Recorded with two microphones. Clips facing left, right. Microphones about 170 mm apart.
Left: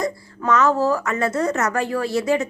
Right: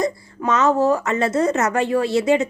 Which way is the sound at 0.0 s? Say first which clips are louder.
Right 2 dB; 20° right (ahead or behind).